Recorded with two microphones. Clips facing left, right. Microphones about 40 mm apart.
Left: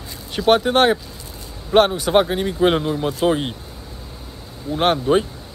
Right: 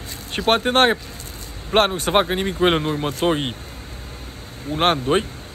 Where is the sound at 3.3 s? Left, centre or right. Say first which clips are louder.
Left 1 dB; right.